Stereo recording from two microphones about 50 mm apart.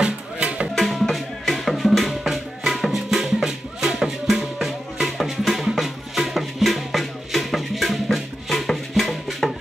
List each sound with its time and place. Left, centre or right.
0.0 s music: right
0.7 s music: centre